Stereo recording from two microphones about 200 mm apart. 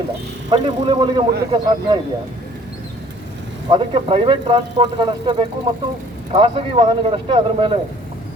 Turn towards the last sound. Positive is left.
turn(degrees=-25)  # may be behind; listen again after turning